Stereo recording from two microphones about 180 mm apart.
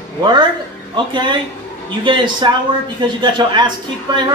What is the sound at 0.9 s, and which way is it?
A man's voice, 25° right (ahead or behind).